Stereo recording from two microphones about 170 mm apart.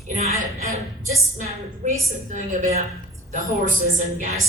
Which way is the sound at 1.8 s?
45° right (ahead or behind).